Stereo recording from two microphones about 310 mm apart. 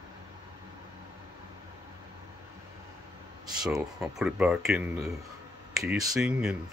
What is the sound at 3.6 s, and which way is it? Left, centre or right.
Speech, centre.